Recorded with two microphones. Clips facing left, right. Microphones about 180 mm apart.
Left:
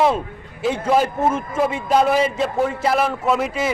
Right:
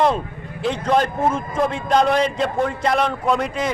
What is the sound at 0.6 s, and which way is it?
A man's voice, 5° left (ahead or behind).